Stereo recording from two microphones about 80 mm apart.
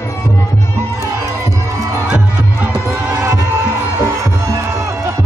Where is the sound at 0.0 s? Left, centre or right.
Left.